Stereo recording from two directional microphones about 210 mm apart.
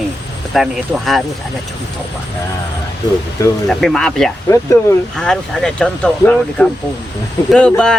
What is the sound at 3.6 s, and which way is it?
Speech, centre (ahead or behind).